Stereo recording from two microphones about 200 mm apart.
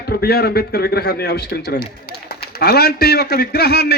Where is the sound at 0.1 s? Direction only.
50° left (ahead or behind).